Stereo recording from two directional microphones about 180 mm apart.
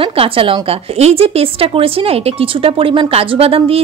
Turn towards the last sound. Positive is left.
turn(degrees=-30)  # may be behind; listen again after turning